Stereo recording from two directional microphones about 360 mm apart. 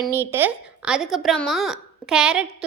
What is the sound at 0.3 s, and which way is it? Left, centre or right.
A woman's voice, centre.